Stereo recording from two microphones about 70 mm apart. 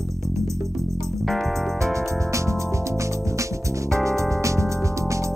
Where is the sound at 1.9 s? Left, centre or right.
Right.